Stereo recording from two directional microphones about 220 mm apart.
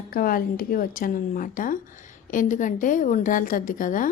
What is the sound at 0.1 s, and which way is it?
A woman's voice, 40° left (ahead or behind).